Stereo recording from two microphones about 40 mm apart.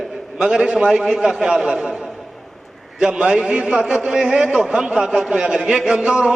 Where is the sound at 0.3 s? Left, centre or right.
Centre.